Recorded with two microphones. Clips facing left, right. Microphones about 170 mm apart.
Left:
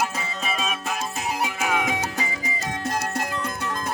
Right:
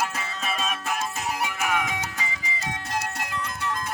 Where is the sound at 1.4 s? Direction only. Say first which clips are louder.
Left 2 dB; 25° left (ahead or behind).